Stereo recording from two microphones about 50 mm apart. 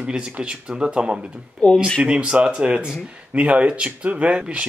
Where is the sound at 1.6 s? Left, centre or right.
Centre.